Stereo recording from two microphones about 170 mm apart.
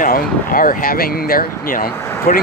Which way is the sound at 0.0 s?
55° left (ahead or behind).